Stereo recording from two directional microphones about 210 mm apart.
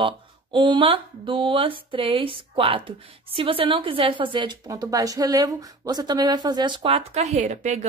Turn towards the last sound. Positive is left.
turn(degrees=-35)  # may be behind; listen again after turning